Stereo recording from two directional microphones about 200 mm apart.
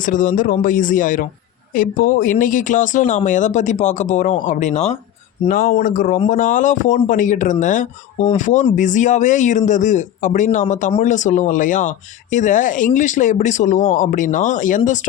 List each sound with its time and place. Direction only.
0.0 s speech: 40° left (ahead or behind)
5.5 s speech: 45° left (ahead or behind)